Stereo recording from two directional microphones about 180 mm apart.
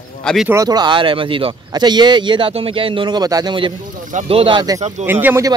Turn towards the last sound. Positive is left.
turn(degrees=-15)  # may be behind; listen again after turning